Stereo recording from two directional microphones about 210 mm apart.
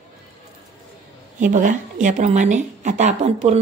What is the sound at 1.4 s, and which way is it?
Speech, 40° right (ahead or behind).